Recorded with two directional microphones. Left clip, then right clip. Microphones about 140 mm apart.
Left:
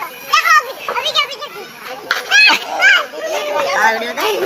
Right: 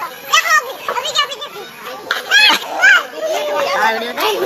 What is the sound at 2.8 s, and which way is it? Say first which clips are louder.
Children playing: right 1 dB; 60° right (ahead or behind).